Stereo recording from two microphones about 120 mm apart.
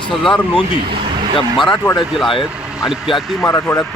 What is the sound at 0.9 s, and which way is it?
Vehicle, 45° right (ahead or behind).